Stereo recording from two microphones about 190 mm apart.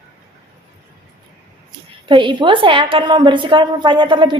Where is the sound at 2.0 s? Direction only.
25° right (ahead or behind).